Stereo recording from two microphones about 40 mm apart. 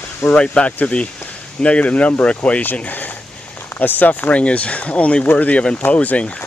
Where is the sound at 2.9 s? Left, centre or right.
Left.